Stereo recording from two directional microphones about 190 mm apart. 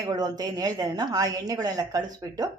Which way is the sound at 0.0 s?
20° right (ahead or behind).